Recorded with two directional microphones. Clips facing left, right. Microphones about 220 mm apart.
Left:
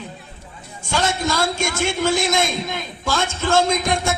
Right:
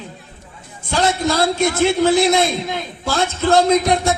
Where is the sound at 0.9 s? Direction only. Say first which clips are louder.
Right 4 dB; 35° right (ahead or behind).